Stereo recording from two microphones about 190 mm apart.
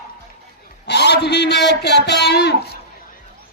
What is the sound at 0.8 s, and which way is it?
A man's voice, 60° left (ahead or behind).